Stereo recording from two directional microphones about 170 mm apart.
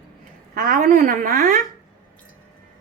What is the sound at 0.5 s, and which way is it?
A woman's voice, 55° right (ahead or behind).